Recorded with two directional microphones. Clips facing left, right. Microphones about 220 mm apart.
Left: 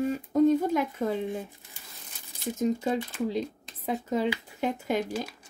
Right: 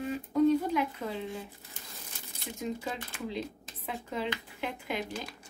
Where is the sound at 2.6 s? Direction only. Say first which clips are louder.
Left 9 dB; 40° left (ahead or behind).